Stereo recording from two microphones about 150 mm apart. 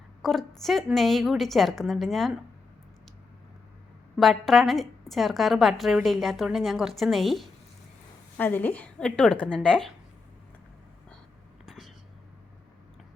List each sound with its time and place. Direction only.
0.2 s a woman's voice: centre (ahead or behind)
4.2 s a woman's voice: centre (ahead or behind)
8.4 s a woman's voice: 10° left (ahead or behind)
11.6 s whispering: centre (ahead or behind)